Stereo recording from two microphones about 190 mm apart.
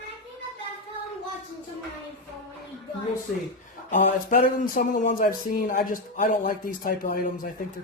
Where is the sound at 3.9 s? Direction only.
45° left (ahead or behind).